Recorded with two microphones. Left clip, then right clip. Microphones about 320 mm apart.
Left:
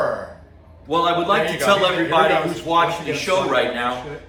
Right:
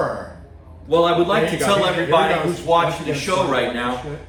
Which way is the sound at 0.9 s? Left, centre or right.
Centre.